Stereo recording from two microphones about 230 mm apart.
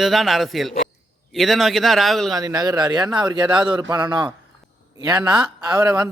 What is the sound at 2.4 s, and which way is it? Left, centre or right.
A man's voice, centre.